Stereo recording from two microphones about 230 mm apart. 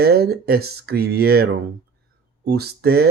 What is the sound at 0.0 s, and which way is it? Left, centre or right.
Speech, right.